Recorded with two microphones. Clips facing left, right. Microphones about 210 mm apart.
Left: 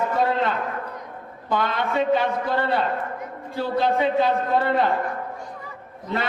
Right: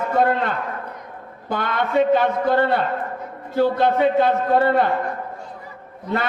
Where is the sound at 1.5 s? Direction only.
55° right (ahead or behind).